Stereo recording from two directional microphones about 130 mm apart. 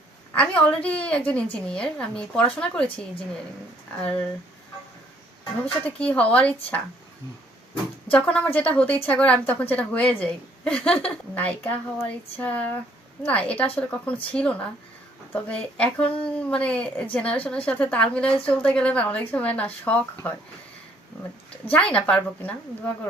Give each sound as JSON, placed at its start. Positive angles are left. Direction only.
{"t": 0.3, "sound": "a woman's voice", "side_deg": 10}
{"t": 6.0, "sound": "a woman's voice", "side_deg": 10}
{"t": 8.1, "sound": "a woman's voice", "side_deg": 10}
{"t": 21.7, "sound": "a woman's voice", "side_deg": 10}